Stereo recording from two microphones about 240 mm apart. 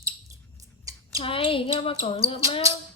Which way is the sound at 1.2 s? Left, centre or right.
Left.